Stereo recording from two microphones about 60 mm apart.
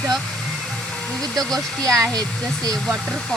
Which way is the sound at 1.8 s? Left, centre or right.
Right.